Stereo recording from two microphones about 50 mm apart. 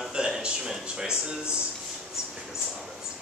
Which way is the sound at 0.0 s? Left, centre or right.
Centre.